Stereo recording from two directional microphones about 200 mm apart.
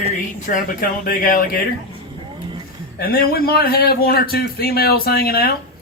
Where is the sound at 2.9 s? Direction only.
50° left (ahead or behind).